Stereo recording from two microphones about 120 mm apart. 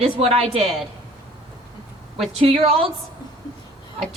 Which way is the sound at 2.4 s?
55° right (ahead or behind).